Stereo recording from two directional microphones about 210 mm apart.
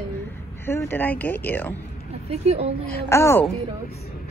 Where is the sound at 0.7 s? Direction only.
10° left (ahead or behind).